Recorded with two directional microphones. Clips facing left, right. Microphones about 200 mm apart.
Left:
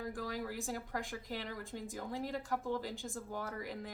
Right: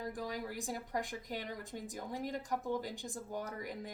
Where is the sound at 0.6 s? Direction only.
20° right (ahead or behind).